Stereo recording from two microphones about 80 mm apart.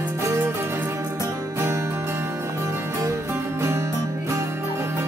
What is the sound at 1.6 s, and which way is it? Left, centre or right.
Music, right.